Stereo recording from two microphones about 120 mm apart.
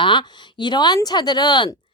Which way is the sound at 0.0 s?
40° left (ahead or behind).